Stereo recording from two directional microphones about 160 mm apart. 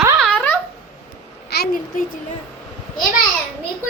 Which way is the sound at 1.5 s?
90° left.